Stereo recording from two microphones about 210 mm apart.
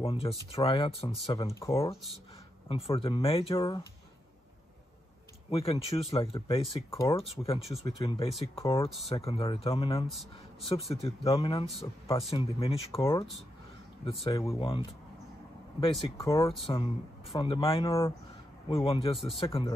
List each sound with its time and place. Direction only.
0.0 s speech: 25° left (ahead or behind)
1.5 s speech: 15° left (ahead or behind)
2.7 s speech: 25° left (ahead or behind)
5.5 s speech: 25° left (ahead or behind)
14.2 s speech: 20° left (ahead or behind)